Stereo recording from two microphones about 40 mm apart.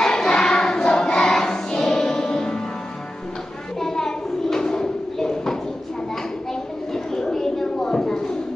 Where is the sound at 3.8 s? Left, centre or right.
Centre.